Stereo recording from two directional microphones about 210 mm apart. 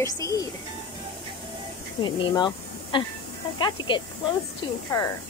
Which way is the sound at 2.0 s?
20° left (ahead or behind).